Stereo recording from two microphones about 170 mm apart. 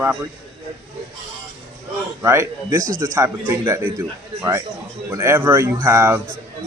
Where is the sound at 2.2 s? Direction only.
15° right (ahead or behind).